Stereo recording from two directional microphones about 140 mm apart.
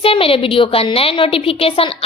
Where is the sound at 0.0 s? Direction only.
40° left (ahead or behind).